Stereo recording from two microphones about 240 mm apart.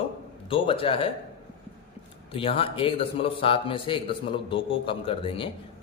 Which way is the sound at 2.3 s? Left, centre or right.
Left.